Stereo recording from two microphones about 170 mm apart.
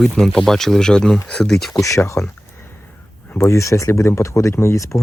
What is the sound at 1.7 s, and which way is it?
Speech, 20° left (ahead or behind).